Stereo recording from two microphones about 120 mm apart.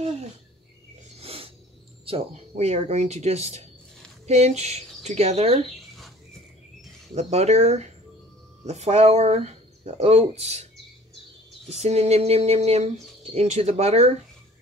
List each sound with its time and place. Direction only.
0.0 s cricket: 65° right (ahead or behind)
1.1 s a sound: 55° right (ahead or behind)
2.0 s speech: 55° right (ahead or behind)
7.2 s speech: 65° right (ahead or behind)
11.8 s speech: 60° right (ahead or behind)